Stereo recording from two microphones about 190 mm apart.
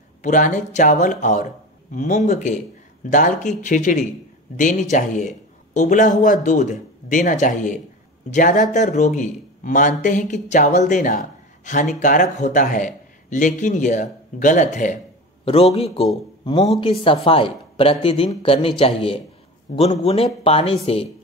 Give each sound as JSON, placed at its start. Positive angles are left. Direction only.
{"t": 0.2, "sound": "speech", "side_deg": 40}